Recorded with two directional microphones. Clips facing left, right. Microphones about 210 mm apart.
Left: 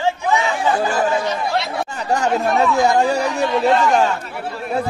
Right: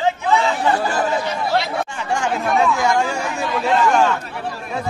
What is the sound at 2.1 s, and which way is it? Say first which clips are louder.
Speech: left 2 dB; 40° left (ahead or behind).